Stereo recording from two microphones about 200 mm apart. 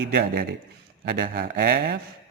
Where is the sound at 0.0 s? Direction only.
55° right (ahead or behind).